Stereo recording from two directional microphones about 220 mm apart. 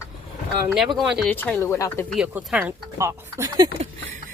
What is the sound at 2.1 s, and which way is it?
A woman's voice, centre (ahead or behind).